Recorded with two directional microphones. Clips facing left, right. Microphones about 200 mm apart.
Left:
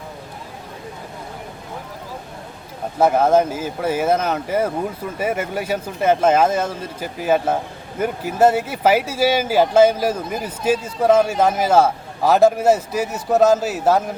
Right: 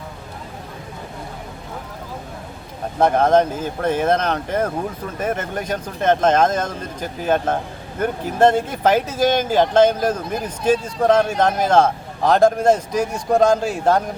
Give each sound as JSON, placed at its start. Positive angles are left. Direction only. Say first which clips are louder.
{"t": 3.0, "sound": "speech", "louder": "even", "side_deg": 5}